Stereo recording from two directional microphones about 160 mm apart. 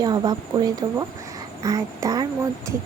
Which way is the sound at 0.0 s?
25° right (ahead or behind).